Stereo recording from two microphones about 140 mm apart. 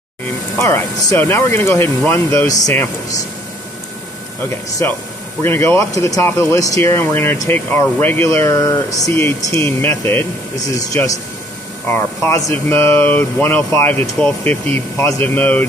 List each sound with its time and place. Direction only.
0.6 s speech: 20° left (ahead or behind)
4.5 s speech: 20° left (ahead or behind)